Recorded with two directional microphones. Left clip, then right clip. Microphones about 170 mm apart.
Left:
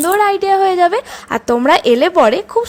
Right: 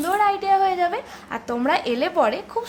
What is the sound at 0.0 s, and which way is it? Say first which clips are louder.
A woman's voice: left 7 dB; 35° left (ahead or behind).